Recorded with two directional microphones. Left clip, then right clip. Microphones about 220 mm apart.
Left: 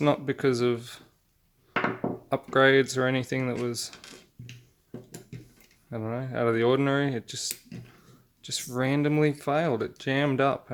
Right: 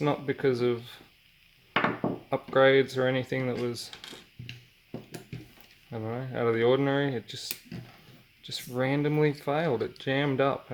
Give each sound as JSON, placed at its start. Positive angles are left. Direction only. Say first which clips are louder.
{"t": 0.0, "sound": "speech", "louder": "left 2 dB", "side_deg": 30}
{"t": 2.3, "sound": "speech", "louder": "left 1 dB", "side_deg": 30}
{"t": 5.9, "sound": "speech", "louder": "left 2 dB", "side_deg": 25}